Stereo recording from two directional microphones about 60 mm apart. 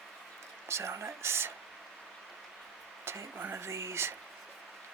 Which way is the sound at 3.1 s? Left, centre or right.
Right.